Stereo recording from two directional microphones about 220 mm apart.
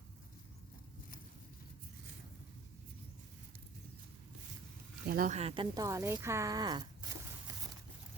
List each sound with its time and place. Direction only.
5.0 s speech: 40° right (ahead or behind); by 7.5 s 15° right (ahead or behind)